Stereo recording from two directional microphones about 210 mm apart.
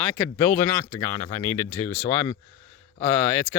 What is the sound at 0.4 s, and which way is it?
Speech, 10° left (ahead or behind).